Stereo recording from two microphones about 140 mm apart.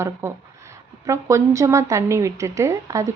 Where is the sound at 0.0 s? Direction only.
20° right (ahead or behind).